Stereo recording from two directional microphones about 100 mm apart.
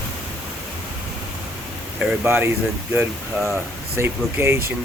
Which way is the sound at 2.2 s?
20° right (ahead or behind).